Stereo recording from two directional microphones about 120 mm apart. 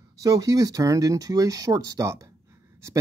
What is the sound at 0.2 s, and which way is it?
Speech, 30° right (ahead or behind).